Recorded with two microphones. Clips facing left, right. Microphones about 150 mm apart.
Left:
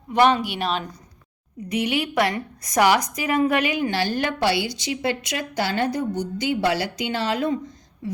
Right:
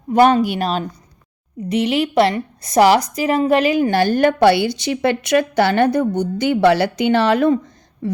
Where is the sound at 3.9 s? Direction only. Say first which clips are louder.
Right 9 dB; 50° right (ahead or behind).